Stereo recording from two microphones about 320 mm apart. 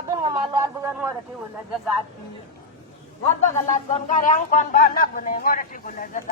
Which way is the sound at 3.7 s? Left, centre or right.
Left.